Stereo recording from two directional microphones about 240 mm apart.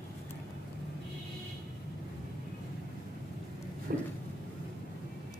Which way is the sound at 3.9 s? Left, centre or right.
Right.